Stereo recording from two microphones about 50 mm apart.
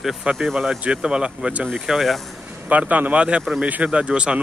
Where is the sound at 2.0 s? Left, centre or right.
Centre.